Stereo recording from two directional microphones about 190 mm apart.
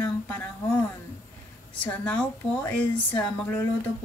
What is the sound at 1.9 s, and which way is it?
Speech, 10° left (ahead or behind).